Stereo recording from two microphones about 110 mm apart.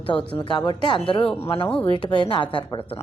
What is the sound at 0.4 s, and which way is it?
A woman's voice, 45° left (ahead or behind).